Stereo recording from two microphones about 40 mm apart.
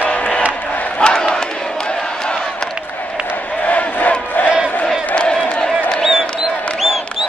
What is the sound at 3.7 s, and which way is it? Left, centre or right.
Crowd, left.